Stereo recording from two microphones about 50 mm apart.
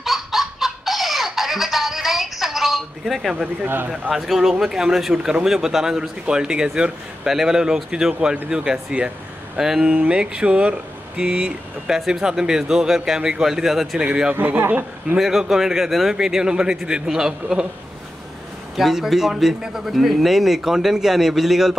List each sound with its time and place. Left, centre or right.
0.0 s a sound: centre
3.6 s speech: right
4.1 s a man's voice: centre
11.9 s a man's voice: centre
14.7 s a man's voice: right
15.1 s a man's voice: centre
18.8 s a man's voice: centre